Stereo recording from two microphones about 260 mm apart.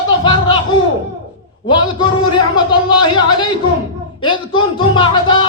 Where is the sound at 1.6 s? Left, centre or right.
Centre.